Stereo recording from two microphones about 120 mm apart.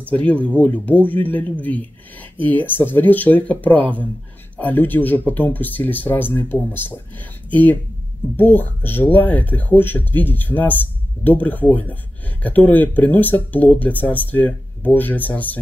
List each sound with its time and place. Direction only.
0.1 s speech: 10° left (ahead or behind)